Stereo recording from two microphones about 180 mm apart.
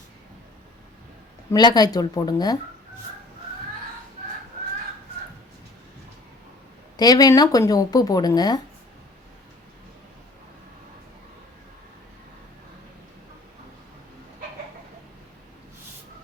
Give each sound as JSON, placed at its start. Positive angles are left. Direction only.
{"t": 1.5, "sound": "speech", "side_deg": 20}
{"t": 6.9, "sound": "speech", "side_deg": 20}